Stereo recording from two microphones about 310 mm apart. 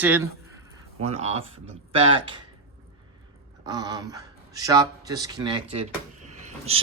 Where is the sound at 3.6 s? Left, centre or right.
Centre.